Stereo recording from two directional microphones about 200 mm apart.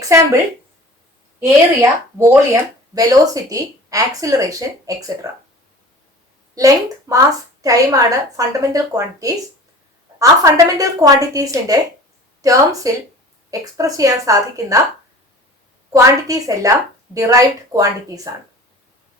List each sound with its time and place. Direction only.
1.5 s speech: 15° right (ahead or behind)
6.6 s speech: 15° right (ahead or behind)
15.9 s speech: 15° right (ahead or behind)